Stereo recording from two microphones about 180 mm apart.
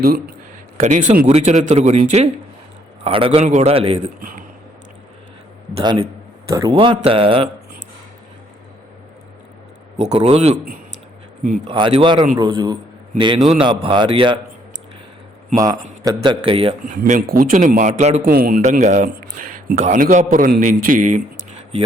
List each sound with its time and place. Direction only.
0.8 s a man's voice: 40° right (ahead or behind)
1.3 s a man's voice: 40° right (ahead or behind)
4.2 s speech: 50° right (ahead or behind)
5.7 s speech: 30° right (ahead or behind)
10.0 s a man's voice: 35° right (ahead or behind)
11.7 s speech: 30° right (ahead or behind)
15.5 s speech: 20° right (ahead or behind)
16.9 s a man's voice: 50° right (ahead or behind)
18.3 s a man's voice: 55° right (ahead or behind)
18.6 s a man's voice: 45° right (ahead or behind)